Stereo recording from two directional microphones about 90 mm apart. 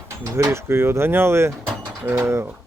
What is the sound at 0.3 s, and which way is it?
Speech, 45° right (ahead or behind).